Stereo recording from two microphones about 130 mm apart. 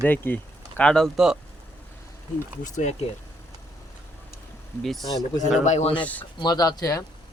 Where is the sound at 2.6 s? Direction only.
70° left (ahead or behind).